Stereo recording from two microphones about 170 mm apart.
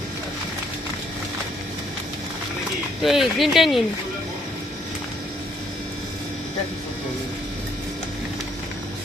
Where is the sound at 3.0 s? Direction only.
Centre (ahead or behind).